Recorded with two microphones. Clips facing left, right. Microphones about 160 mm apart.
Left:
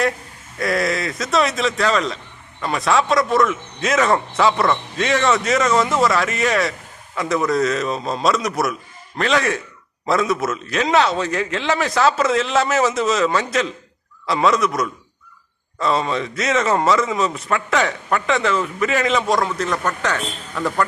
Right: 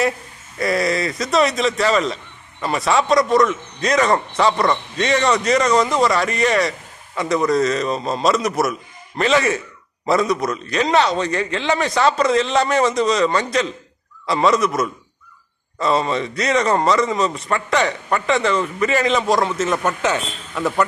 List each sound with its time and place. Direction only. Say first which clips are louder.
0.6 s a man's voice: right 1 dB; centre (ahead or behind)
19.7 s speech: right 2 dB; 20° right (ahead or behind)